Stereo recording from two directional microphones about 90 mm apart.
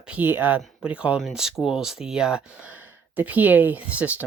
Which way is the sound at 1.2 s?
5° right (ahead or behind).